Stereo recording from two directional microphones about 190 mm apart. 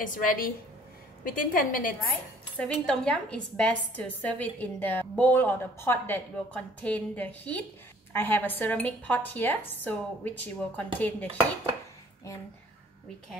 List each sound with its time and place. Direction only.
0.0 s a woman's voice: 45° left (ahead or behind)
2.5 s a woman's voice: 5° left (ahead or behind)